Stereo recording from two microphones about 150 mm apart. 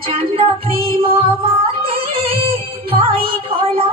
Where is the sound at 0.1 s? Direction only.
40° right (ahead or behind).